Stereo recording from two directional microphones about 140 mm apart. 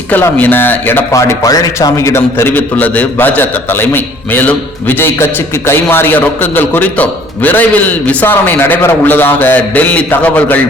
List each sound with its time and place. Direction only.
0.1 s speech: 10° left (ahead or behind)